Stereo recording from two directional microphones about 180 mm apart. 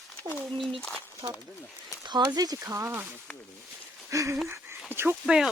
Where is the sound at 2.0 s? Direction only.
25° right (ahead or behind).